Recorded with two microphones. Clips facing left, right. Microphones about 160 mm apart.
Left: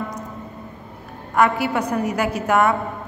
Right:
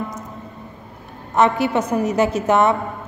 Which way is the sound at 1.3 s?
20° right (ahead or behind).